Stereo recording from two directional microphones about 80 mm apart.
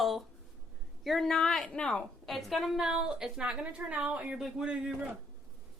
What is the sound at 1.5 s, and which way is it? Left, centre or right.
Speech, centre.